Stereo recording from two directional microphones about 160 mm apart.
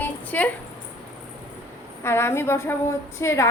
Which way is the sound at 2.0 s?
15° left (ahead or behind).